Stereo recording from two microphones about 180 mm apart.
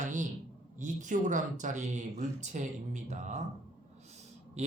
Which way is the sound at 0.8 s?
45° right (ahead or behind).